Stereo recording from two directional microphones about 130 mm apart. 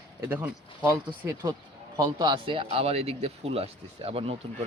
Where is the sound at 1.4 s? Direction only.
30° right (ahead or behind); by 4.6 s 45° right (ahead or behind).